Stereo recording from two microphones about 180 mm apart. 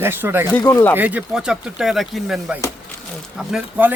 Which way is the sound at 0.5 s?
10° left (ahead or behind).